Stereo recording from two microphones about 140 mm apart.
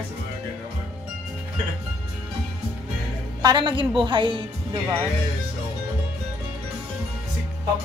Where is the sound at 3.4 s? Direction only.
35° right (ahead or behind).